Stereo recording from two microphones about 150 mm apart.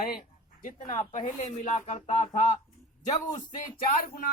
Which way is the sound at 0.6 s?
55° left (ahead or behind).